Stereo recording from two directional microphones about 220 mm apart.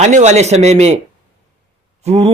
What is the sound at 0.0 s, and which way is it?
Speech, 30° right (ahead or behind).